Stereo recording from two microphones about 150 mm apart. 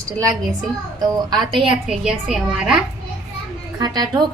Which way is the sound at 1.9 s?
5° right (ahead or behind).